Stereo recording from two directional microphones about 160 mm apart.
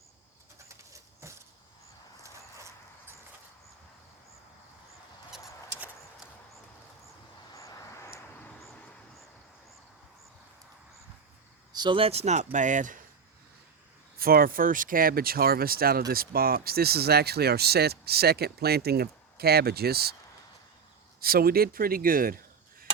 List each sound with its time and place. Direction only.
0.9 s keys jangling: 15° right (ahead or behind)
2.2 s a sound: 20° right (ahead or behind)
7.5 s a sound: 20° left (ahead or behind)
11.7 s speech: 30° right (ahead or behind); by 13.0 s 55° right (ahead or behind)
14.2 s speech: 65° right (ahead or behind)
21.2 s speech: 70° right (ahead or behind)